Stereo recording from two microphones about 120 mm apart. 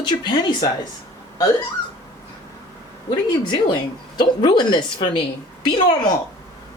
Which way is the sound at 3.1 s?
40° left (ahead or behind).